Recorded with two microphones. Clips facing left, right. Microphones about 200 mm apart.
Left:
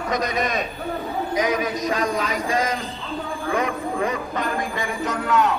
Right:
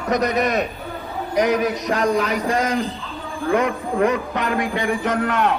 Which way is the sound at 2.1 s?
65° right (ahead or behind).